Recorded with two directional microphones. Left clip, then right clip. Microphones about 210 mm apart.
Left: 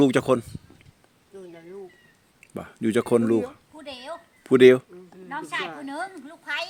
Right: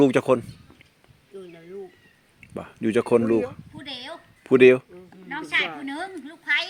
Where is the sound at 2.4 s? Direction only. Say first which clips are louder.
Right 1 dB; 25° left (ahead or behind).